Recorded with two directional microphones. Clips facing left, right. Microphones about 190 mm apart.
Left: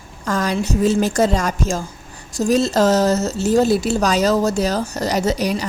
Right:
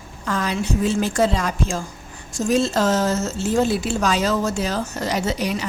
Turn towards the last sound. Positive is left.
turn(degrees=40)  # may be behind; listen again after turning